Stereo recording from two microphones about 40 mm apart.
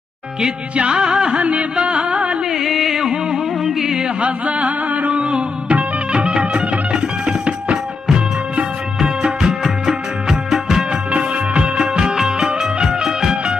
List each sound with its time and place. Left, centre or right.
0.4 s music: right
1.4 s music: right
2.5 s music: centre
4.2 s a sound: right
5.2 s music of bollywood: right
7.2 s music: right
10.9 s music: right
11.7 s music: centre